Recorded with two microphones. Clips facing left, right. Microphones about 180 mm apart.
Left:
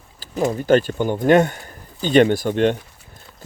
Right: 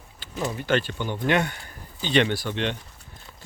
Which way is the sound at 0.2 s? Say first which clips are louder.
Left 8 dB; 40° left (ahead or behind).